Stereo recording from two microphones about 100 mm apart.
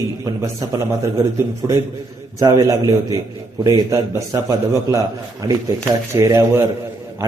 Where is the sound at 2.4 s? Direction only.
35° right (ahead or behind).